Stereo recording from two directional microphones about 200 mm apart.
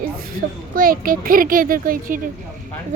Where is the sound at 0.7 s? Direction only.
45° right (ahead or behind).